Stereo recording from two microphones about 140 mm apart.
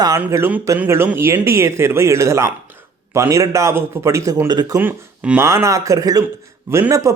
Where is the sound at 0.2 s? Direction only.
15° right (ahead or behind).